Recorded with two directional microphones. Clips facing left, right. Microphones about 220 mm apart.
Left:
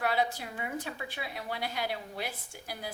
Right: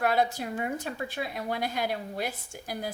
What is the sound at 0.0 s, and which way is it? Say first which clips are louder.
A woman's voice: right 4 dB; 45° right (ahead or behind).